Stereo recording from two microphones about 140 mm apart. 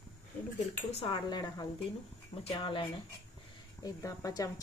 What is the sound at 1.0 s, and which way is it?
Speech, 30° left (ahead or behind).